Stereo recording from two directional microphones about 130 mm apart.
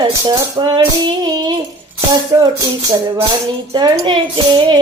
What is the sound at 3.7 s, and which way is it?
Music, 35° right (ahead or behind).